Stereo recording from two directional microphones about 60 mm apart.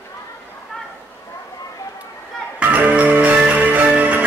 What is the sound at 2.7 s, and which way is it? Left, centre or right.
Music, right.